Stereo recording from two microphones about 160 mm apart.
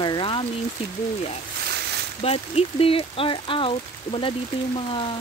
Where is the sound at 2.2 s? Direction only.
40° left (ahead or behind).